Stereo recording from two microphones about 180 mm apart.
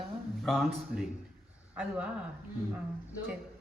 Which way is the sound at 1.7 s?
10° right (ahead or behind).